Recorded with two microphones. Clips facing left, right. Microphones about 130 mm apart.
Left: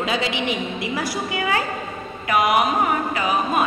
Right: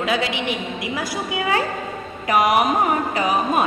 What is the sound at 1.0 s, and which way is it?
Speech, 20° right (ahead or behind).